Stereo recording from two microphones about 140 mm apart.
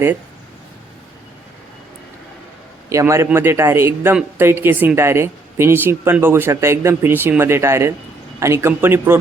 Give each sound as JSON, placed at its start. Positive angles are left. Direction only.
{"t": 2.9, "sound": "a man's voice", "side_deg": -20}